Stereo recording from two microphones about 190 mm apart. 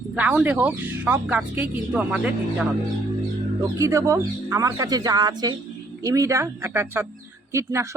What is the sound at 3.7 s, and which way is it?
A woman's voice, 15° right (ahead or behind).